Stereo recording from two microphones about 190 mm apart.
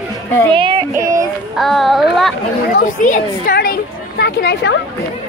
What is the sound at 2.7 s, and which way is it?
Speech, 45° left (ahead or behind).